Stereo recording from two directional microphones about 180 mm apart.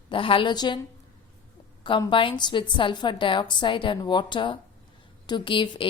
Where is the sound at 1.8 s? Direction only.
25° left (ahead or behind).